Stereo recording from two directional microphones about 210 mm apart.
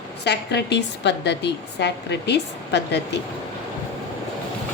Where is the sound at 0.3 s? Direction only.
55° left (ahead or behind).